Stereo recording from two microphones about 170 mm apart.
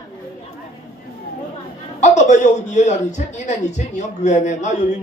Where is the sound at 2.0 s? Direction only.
45° left (ahead or behind).